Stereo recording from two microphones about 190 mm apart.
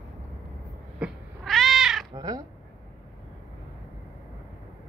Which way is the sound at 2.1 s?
20° right (ahead or behind).